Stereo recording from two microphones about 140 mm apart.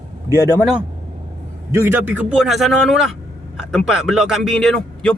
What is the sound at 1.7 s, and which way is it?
Speech, 15° right (ahead or behind).